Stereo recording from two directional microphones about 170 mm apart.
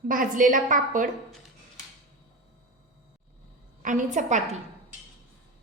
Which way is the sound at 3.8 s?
50° right (ahead or behind).